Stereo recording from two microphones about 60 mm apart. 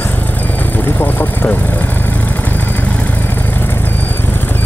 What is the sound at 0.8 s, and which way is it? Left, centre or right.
Vehicle, left.